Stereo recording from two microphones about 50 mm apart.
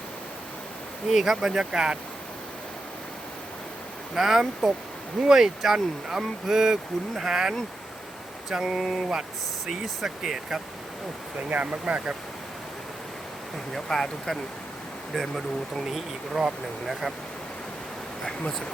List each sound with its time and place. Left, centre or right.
1.0 s speech: centre
4.1 s speech: centre
8.7 s speech: centre
11.4 s speech: right
13.7 s speech: centre